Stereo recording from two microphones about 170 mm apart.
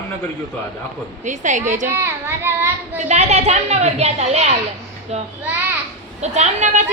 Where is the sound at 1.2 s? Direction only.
45° right (ahead or behind).